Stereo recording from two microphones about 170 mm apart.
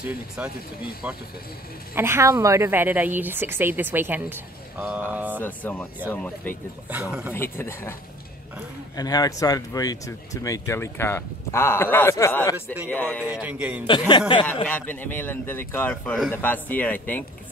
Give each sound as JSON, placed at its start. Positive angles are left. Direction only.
{"t": 0.4, "sound": "a woman's voice", "side_deg": -10}
{"t": 5.4, "sound": "speech", "side_deg": 10}
{"t": 6.9, "sound": "a woman's voice", "side_deg": -10}
{"t": 7.3, "sound": "speech", "side_deg": 15}
{"t": 8.9, "sound": "speech", "side_deg": 20}
{"t": 13.2, "sound": "a woman's voice", "side_deg": -10}
{"t": 13.8, "sound": "speech", "side_deg": 25}
{"t": 14.4, "sound": "speech", "side_deg": 10}